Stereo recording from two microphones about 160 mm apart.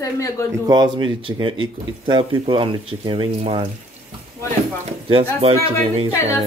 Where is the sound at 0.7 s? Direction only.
25° right (ahead or behind).